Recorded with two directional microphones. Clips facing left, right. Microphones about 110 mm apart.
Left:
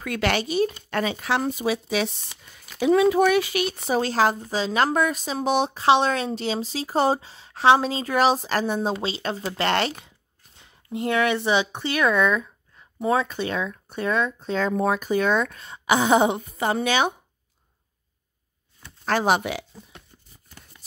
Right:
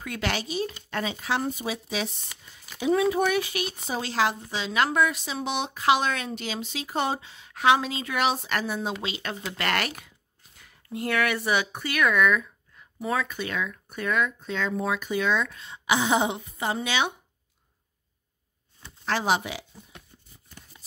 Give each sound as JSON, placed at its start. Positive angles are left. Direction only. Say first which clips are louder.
{"t": 0.0, "sound": "speech", "louder": "left 6 dB", "side_deg": 70}
{"t": 2.8, "sound": "speech", "louder": "left 5 dB", "side_deg": 90}
{"t": 4.0, "sound": "speech", "louder": "left 3 dB", "side_deg": 40}
{"t": 19.0, "sound": "speech", "louder": "left 4 dB", "side_deg": 50}